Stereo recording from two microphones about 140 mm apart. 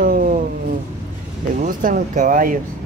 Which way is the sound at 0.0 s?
90° right.